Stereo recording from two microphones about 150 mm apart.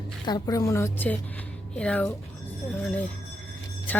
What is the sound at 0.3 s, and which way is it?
A woman's voice, 25° left (ahead or behind).